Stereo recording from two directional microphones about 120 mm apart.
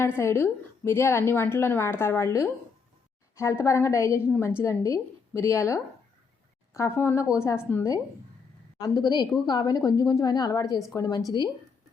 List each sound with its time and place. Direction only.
0.2 s a woman's voice: 20° left (ahead or behind)
8.8 s a woman's voice: 35° left (ahead or behind)